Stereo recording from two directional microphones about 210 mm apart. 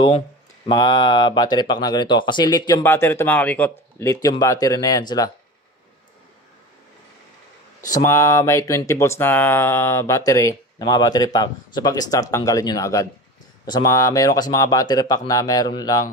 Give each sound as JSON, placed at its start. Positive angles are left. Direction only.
{"t": 0.7, "sound": "speech", "side_deg": 20}
{"t": 7.9, "sound": "speech", "side_deg": 15}